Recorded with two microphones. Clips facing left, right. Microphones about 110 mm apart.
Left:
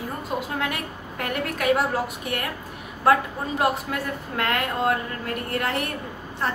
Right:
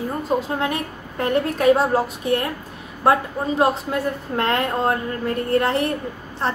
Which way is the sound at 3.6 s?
30° right (ahead or behind).